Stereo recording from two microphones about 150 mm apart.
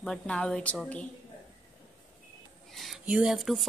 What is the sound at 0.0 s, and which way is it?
Speech, 5° left (ahead or behind).